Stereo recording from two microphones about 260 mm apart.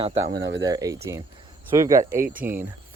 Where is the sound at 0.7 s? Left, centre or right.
Centre.